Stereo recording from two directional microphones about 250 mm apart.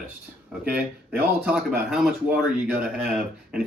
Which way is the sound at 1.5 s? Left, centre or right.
Centre.